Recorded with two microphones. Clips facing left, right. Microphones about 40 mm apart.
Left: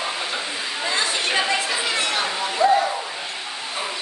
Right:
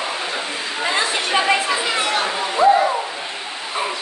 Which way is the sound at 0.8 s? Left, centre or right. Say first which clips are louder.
Right 3 dB; right.